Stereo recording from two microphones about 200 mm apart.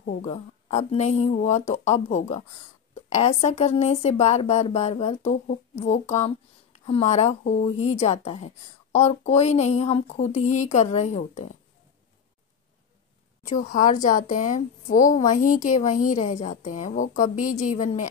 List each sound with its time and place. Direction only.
0.0 s speech: 45° left (ahead or behind)
0.3 s a woman's voice: 35° left (ahead or behind)
13.4 s a woman's voice: 40° left (ahead or behind)